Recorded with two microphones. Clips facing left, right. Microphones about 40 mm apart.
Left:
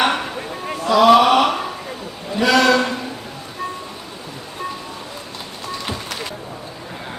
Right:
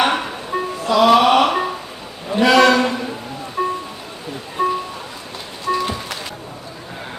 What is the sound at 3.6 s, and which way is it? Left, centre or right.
Music, right.